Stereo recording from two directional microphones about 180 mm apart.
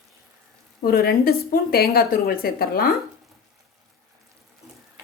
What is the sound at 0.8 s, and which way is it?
A woman's voice, 55° left (ahead or behind).